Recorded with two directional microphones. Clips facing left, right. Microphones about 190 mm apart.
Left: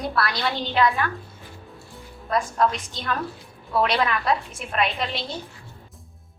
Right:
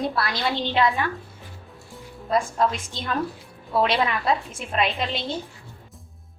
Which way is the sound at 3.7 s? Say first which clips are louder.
Even; 25° right (ahead or behind).